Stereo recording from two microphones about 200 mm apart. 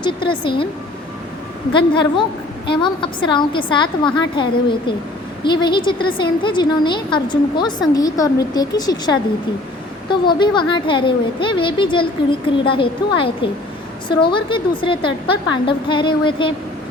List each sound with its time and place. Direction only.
0.0 s a woman's voice: 25° left (ahead or behind)
1.7 s a woman's voice: 25° left (ahead or behind)